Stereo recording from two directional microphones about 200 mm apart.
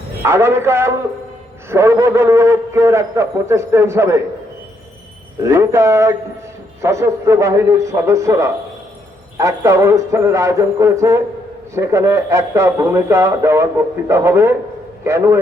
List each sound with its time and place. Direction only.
0.3 s speech: 15° right (ahead or behind)
5.4 s speech: 15° right (ahead or behind)